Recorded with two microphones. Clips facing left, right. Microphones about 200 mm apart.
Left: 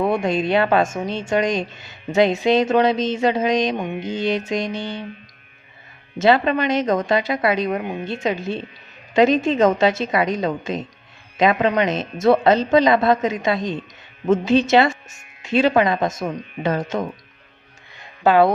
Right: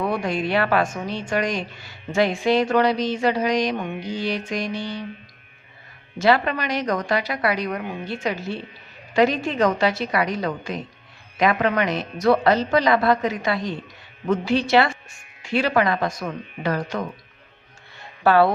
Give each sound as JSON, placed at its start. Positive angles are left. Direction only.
{"t": 0.0, "sound": "a woman's voice", "side_deg": 25}
{"t": 6.1, "sound": "a woman's voice", "side_deg": 20}
{"t": 17.9, "sound": "music", "side_deg": 20}